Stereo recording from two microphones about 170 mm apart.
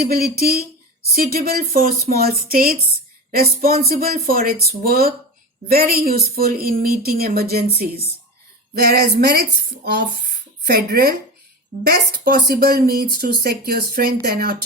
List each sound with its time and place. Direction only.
0.0 s speech: 65° right (ahead or behind)
3.8 s speech: 60° right (ahead or behind)
7.5 s a sound: 70° right (ahead or behind)
10.6 s speech: 70° right (ahead or behind)